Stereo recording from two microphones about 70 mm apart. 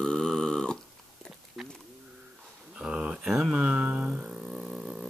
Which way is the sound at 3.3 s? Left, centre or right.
Centre.